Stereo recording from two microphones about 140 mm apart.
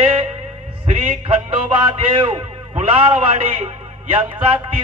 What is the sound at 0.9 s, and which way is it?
Music, 40° right (ahead or behind).